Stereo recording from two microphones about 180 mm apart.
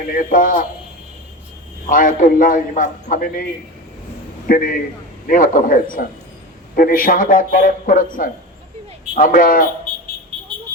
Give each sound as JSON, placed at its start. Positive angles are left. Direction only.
{"t": 0.1, "sound": "a man's voice", "side_deg": 50}
{"t": 1.9, "sound": "a man's voice", "side_deg": 50}